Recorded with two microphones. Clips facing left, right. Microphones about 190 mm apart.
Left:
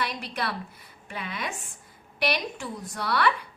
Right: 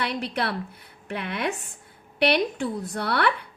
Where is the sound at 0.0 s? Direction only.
60° right (ahead or behind).